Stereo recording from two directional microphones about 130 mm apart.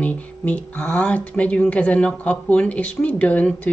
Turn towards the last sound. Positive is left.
turn(degrees=10)  # may be behind; listen again after turning